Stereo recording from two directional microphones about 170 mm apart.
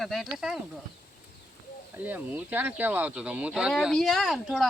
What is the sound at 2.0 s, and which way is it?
Speech, 10° right (ahead or behind).